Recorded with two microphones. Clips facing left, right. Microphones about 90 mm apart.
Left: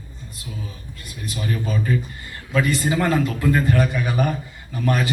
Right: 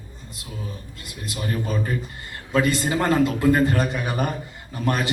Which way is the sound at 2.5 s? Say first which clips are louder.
Even; 20° right (ahead or behind).